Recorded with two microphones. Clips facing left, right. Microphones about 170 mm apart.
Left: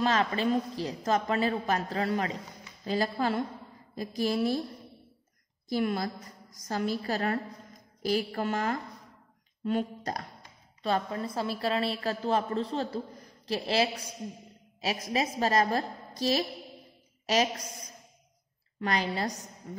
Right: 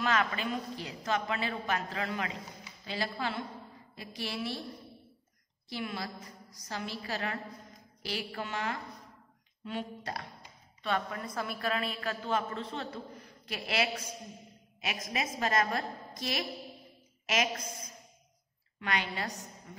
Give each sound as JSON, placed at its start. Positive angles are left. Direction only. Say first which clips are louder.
{"t": 0.0, "sound": "a woman's voice", "louder": "left 4 dB", "side_deg": 35}
{"t": 5.7, "sound": "a sound", "louder": "left 9 dB", "side_deg": 45}
{"t": 6.7, "sound": "a woman's voice", "louder": "left 7 dB", "side_deg": 40}
{"t": 8.0, "sound": "a sound", "louder": "left 9 dB", "side_deg": 45}
{"t": 10.8, "sound": "a woman's voice", "louder": "left 4 dB", "side_deg": 35}
{"t": 18.8, "sound": "a woman's voice", "louder": "left 5 dB", "side_deg": 35}